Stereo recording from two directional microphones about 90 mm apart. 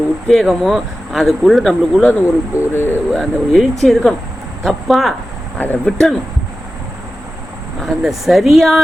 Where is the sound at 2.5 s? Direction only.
25° left (ahead or behind).